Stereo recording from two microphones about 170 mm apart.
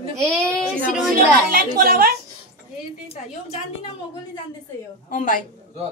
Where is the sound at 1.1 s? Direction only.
60° right (ahead or behind).